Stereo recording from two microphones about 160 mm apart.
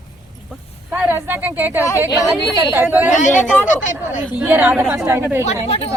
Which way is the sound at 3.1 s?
50° left (ahead or behind).